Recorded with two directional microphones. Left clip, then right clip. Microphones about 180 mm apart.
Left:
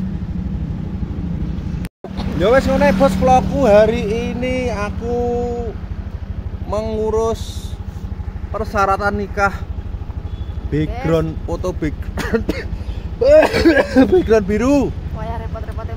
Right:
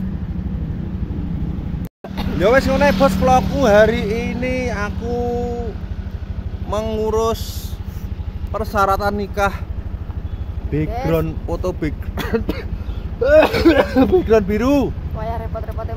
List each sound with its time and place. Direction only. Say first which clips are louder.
2.1 s speech: left 1 dB; 5° right (ahead or behind)
6.7 s speech: left 1 dB; centre (ahead or behind)
8.5 s speech: even; 5° left (ahead or behind)
11.1 s speech: left 3 dB; 5° left (ahead or behind)
12.3 s throat clearing: left 2 dB; 15° left (ahead or behind)
13.2 s speech: left 2 dB; 20° left (ahead or behind); by 14.9 s 5° left (ahead or behind)
15.1 s a sound: right 2 dB; 15° right (ahead or behind)